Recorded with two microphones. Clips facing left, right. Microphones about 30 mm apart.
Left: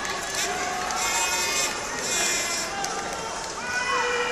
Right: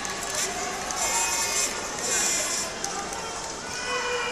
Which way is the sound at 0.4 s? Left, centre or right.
Centre.